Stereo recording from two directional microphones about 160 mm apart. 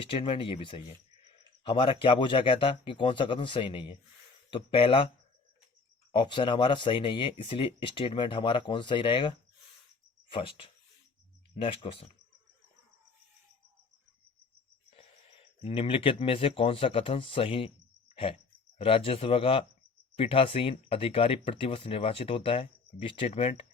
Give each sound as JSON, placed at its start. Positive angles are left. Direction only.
{"t": 0.0, "sound": "speech", "side_deg": 35}
{"t": 6.1, "sound": "speech", "side_deg": 30}
{"t": 10.3, "sound": "speech", "side_deg": 35}
{"t": 14.8, "sound": "speech", "side_deg": 35}
{"t": 18.1, "sound": "cricket", "side_deg": 35}
{"t": 18.8, "sound": "speech", "side_deg": 35}